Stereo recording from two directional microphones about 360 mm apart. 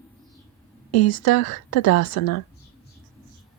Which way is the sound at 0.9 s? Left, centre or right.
Left.